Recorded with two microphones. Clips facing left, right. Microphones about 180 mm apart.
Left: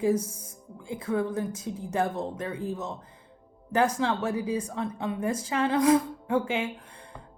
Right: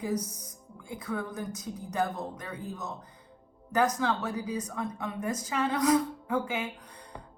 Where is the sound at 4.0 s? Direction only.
25° left (ahead or behind).